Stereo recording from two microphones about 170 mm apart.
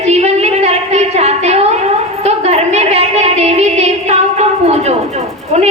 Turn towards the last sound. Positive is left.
turn(degrees=-40)  # may be behind; listen again after turning